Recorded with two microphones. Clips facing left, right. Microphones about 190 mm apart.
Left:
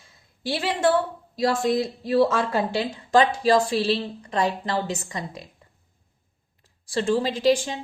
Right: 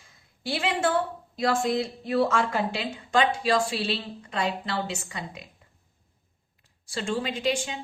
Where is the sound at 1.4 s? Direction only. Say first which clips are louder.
Left 3 dB; 35° left (ahead or behind).